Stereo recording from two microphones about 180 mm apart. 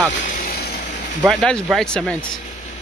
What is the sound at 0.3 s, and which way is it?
Vehicle, 55° left (ahead or behind).